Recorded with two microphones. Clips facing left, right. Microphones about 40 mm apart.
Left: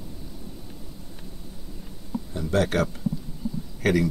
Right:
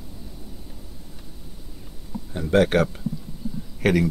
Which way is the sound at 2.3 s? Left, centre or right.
Right.